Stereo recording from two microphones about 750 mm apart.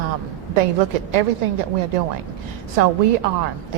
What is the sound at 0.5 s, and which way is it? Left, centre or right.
A woman's voice, right.